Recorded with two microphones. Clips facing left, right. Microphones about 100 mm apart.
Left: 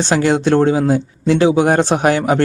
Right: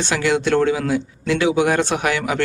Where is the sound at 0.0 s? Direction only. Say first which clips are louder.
Left 5 dB; 35° left (ahead or behind).